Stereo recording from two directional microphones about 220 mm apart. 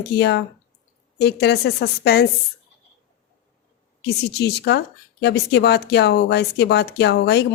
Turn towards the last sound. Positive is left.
turn(degrees=50)  # may be behind; listen again after turning